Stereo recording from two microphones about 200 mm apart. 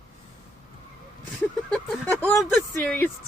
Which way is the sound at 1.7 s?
10° left (ahead or behind).